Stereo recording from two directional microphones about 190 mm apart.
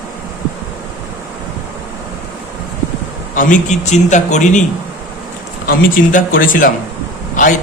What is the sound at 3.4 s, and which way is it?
A man's voice, 40° left (ahead or behind).